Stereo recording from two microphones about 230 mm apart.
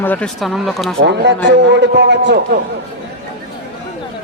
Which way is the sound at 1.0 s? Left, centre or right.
Right.